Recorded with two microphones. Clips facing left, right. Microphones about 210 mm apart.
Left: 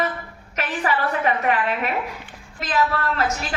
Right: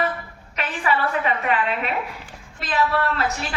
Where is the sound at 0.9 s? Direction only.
40° left (ahead or behind).